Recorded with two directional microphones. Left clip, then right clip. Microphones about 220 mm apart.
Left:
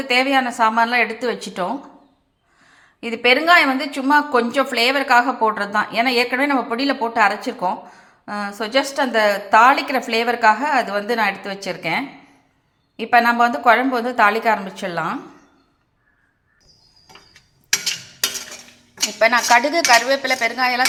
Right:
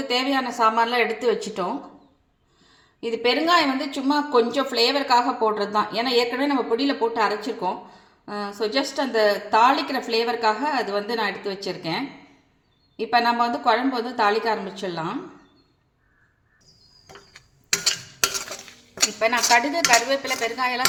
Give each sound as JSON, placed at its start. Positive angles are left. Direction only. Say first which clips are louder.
{"t": 0.1, "sound": "a woman's voice", "louder": "left 7 dB", "side_deg": 20}
{"t": 3.0, "sound": "a woman's voice", "louder": "left 5 dB", "side_deg": 15}
{"t": 19.2, "sound": "a woman's voice", "louder": "left 6 dB", "side_deg": 5}